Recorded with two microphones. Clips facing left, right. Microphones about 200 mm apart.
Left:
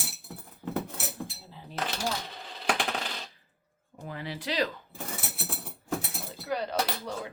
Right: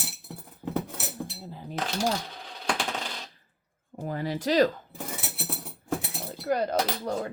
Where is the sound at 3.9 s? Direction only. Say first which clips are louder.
Right 7 dB; 45° right (ahead or behind).